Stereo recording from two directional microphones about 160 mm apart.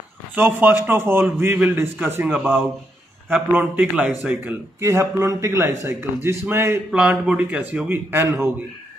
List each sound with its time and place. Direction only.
0.4 s speech: 10° right (ahead or behind)